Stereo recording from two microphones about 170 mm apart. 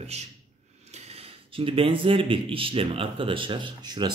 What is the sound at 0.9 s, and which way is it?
Speech, 35° right (ahead or behind).